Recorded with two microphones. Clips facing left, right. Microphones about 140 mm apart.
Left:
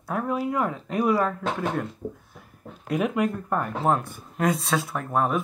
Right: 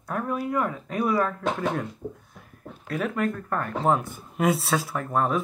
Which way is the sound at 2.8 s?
15° left (ahead or behind).